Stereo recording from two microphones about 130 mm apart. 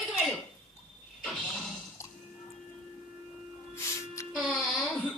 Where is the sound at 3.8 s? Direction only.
25° left (ahead or behind).